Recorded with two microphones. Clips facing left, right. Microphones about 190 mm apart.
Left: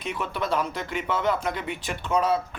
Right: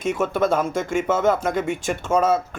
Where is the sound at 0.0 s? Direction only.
45° right (ahead or behind).